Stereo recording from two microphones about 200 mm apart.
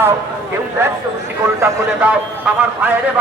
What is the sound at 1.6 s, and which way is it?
A man's voice, 5° right (ahead or behind).